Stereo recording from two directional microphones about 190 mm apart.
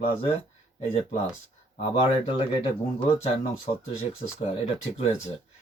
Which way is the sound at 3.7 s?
35° left (ahead or behind).